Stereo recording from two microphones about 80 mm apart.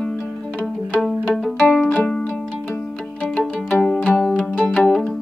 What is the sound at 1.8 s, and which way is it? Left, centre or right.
Music, centre.